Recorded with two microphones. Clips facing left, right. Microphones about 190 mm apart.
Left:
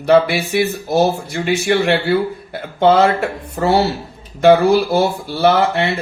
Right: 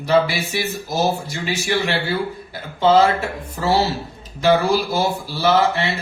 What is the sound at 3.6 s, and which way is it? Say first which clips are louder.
Speech: left 4 dB; 55° left (ahead or behind).